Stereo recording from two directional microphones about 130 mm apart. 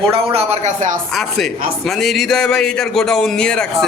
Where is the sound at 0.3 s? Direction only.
55° right (ahead or behind).